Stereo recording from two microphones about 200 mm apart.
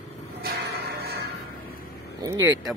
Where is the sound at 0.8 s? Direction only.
50° right (ahead or behind).